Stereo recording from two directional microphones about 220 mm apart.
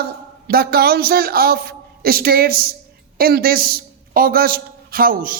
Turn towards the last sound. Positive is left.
turn(degrees=-40)  # may be behind; listen again after turning